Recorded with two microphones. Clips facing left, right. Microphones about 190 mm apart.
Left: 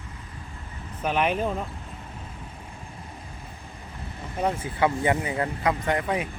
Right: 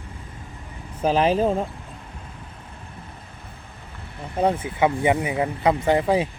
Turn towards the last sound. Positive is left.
turn(degrees=-30)  # may be behind; listen again after turning